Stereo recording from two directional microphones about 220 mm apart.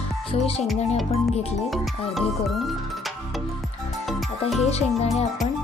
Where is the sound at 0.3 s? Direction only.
25° left (ahead or behind).